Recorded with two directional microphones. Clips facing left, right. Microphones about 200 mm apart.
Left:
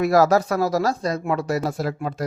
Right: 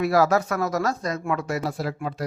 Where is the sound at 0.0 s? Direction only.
45° left (ahead or behind).